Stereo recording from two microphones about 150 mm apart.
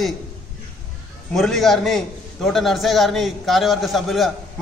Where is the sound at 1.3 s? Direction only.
Centre (ahead or behind).